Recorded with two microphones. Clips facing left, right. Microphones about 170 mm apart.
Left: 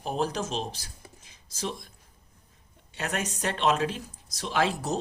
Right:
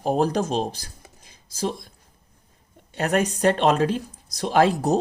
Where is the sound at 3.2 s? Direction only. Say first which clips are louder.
Right 10 dB; 35° right (ahead or behind).